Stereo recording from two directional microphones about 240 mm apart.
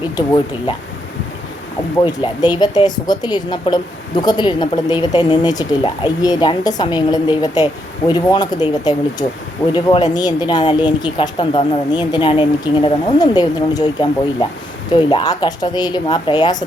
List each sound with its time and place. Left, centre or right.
2.2 s a woman's voice: centre